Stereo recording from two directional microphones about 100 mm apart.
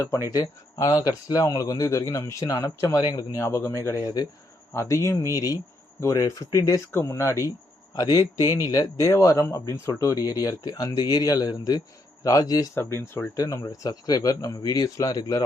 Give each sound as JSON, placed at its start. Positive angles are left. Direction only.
{"t": 0.3, "sound": "speech", "side_deg": 40}
{"t": 3.0, "sound": "speech", "side_deg": 45}
{"t": 3.3, "sound": "speech", "side_deg": 25}
{"t": 12.7, "sound": "speech", "side_deg": 25}
{"t": 13.3, "sound": "speech", "side_deg": 35}